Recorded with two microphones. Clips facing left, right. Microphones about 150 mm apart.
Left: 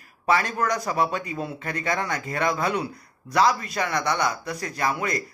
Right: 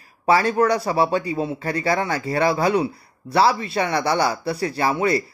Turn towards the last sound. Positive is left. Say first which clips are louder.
# right 6 dB
turn(degrees=-30)  # may be behind; listen again after turning